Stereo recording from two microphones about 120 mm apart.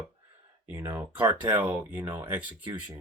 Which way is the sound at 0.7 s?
20° right (ahead or behind).